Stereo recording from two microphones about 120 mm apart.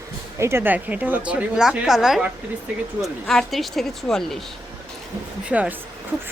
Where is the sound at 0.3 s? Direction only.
20° right (ahead or behind); by 4.4 s 5° left (ahead or behind).